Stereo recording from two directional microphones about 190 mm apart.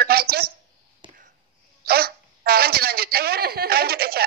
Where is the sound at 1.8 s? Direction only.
55° right (ahead or behind).